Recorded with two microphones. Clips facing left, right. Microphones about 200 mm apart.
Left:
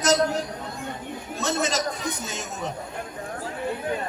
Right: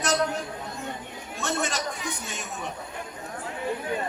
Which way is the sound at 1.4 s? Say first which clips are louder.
Left 3 dB; 40° left (ahead or behind).